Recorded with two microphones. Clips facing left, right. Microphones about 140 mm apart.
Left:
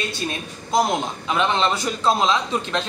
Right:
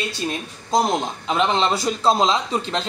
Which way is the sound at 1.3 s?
30° right (ahead or behind).